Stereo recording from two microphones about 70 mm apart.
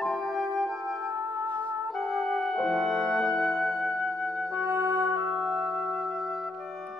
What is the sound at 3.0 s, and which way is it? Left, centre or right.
Music, right.